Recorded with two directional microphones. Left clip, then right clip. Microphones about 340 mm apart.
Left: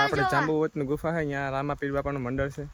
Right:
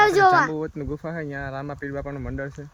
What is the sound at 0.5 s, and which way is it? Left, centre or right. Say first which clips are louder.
Speech: left 3 dB; centre.